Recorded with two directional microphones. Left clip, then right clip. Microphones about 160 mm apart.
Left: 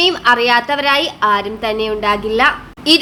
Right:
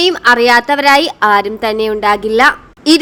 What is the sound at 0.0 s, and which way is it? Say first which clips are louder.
A woman's voice: right 3 dB; 35° right (ahead or behind).